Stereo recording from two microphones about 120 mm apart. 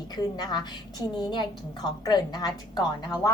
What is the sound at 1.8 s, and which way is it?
Speech, 35° left (ahead or behind).